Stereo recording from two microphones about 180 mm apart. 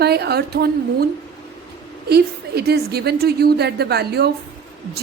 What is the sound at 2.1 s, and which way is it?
A woman's voice, 65° right (ahead or behind).